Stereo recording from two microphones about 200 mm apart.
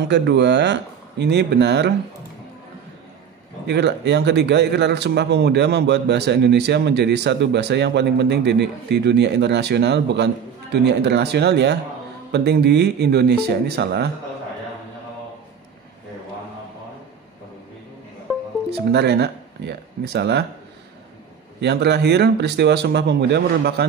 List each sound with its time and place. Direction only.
0.0 s a man's voice: 60° right (ahead or behind)
3.6 s a man's voice: 60° right (ahead or behind)
18.3 s music: centre (ahead or behind)
18.7 s speech: 55° right (ahead or behind)
21.5 s a man's voice: 55° right (ahead or behind)